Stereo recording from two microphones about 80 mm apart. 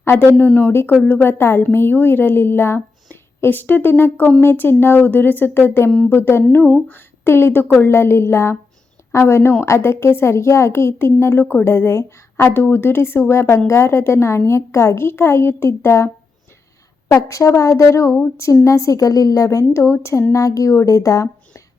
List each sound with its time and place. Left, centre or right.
0.0 s a woman's voice: left
17.1 s a woman's voice: left